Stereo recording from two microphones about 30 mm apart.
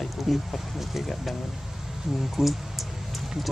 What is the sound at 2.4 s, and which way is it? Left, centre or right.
Speech, centre.